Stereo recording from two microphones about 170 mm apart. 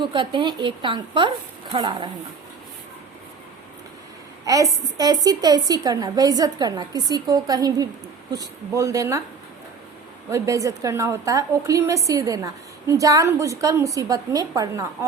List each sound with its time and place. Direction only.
0.0 s a woman's voice: 25° right (ahead or behind)
4.4 s a woman's voice: 20° right (ahead or behind)
10.2 s a woman's voice: 20° right (ahead or behind)